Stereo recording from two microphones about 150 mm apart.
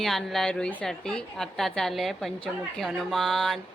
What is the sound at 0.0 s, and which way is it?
A woman's voice, centre (ahead or behind).